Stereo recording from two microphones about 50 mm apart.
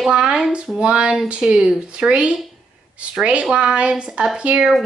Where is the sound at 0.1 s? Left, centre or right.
Centre.